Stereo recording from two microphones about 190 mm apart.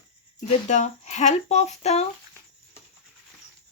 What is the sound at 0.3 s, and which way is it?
Speech, 40° left (ahead or behind).